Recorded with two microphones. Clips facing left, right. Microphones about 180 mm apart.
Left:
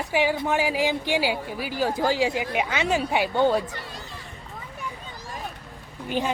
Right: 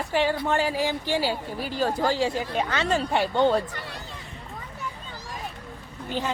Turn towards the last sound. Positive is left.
turn(degrees=15)  # may be behind; listen again after turning